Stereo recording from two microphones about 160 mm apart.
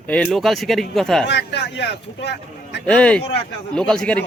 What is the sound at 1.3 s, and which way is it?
Speech, 90° left.